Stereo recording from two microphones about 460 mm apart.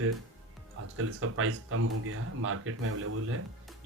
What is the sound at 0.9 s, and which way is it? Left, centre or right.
Speech, right.